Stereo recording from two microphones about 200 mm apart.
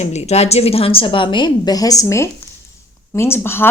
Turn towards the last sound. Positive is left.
turn(degrees=10)  # may be behind; listen again after turning